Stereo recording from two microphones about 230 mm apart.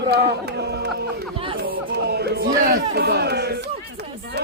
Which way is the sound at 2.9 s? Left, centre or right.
Right.